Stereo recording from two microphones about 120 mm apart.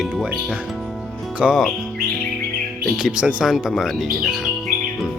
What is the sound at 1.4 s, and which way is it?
Speech, 5° right (ahead or behind).